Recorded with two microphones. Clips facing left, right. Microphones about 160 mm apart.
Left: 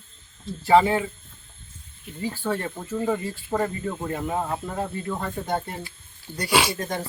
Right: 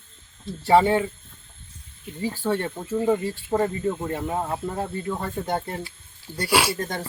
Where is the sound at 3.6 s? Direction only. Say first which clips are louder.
Right 3 dB; centre (ahead or behind).